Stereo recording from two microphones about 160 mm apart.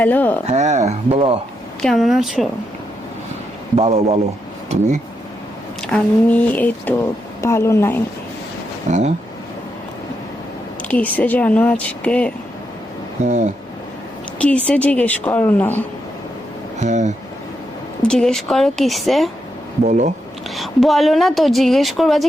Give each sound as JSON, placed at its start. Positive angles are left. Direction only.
{"t": 0.0, "sound": "speech", "side_deg": 10}
{"t": 0.4, "sound": "speech", "side_deg": -45}
{"t": 1.8, "sound": "speech", "side_deg": 0}
{"t": 3.8, "sound": "speech", "side_deg": -40}
{"t": 5.8, "sound": "speech", "side_deg": 5}
{"t": 8.9, "sound": "speech", "side_deg": -45}
{"t": 10.8, "sound": "speech", "side_deg": 10}
{"t": 13.2, "sound": "speech", "side_deg": -50}
{"t": 14.3, "sound": "speech", "side_deg": 5}
{"t": 16.8, "sound": "speech", "side_deg": -50}
{"t": 18.0, "sound": "speech", "side_deg": 5}
{"t": 19.8, "sound": "speech", "side_deg": -50}
{"t": 20.6, "sound": "speech", "side_deg": 0}